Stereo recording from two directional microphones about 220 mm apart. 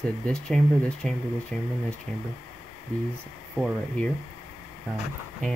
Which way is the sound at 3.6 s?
Centre (ahead or behind).